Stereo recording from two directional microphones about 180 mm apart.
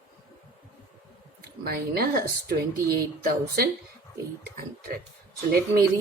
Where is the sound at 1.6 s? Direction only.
60° right (ahead or behind).